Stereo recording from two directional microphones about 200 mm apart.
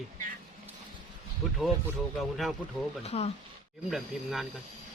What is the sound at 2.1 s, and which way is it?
Speech, centre (ahead or behind).